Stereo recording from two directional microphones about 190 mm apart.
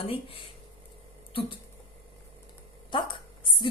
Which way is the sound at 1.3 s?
30° left (ahead or behind).